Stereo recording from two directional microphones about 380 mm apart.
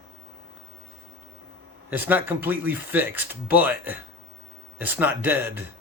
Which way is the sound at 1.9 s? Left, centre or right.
Centre.